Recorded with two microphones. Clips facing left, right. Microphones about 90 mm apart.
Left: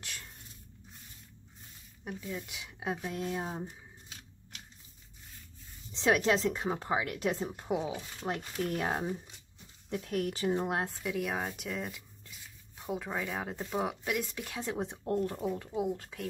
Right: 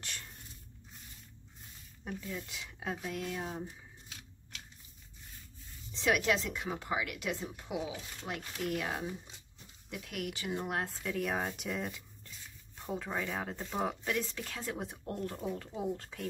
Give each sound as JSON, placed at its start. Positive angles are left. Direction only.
{"t": 0.0, "sound": "walk", "side_deg": 0}
{"t": 2.0, "sound": "speech", "side_deg": 10}
{"t": 5.9, "sound": "a woman's voice", "side_deg": 25}
{"t": 10.6, "sound": "speech", "side_deg": 20}
{"t": 10.9, "sound": "speech", "side_deg": 5}
{"t": 14.7, "sound": "speech", "side_deg": 25}
{"t": 15.1, "sound": "speech", "side_deg": 10}